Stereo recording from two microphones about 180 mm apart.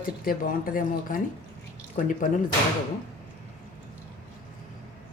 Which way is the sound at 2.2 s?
45° left (ahead or behind).